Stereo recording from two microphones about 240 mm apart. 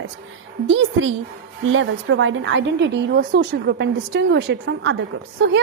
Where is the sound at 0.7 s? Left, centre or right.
Right.